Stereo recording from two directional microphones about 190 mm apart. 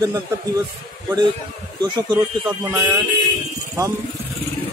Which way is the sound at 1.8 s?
20° right (ahead or behind).